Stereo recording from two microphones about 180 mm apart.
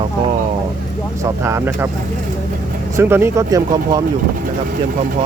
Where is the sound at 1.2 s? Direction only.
15° right (ahead or behind).